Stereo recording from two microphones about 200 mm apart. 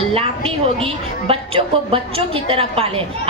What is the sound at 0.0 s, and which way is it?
A woman's voice, 30° right (ahead or behind).